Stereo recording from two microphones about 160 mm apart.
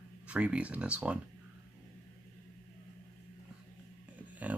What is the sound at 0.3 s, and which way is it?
Speech, 5° right (ahead or behind).